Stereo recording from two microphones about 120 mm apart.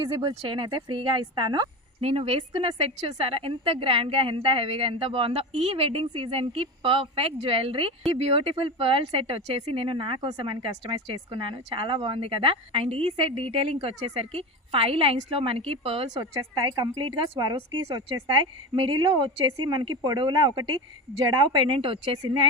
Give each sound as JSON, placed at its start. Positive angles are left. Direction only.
{"t": 0.0, "sound": "a woman's voice", "side_deg": -40}
{"t": 2.0, "sound": "speech", "side_deg": -55}
{"t": 16.7, "sound": "a woman's voice", "side_deg": -30}
{"t": 17.1, "sound": "a woman's voice", "side_deg": -40}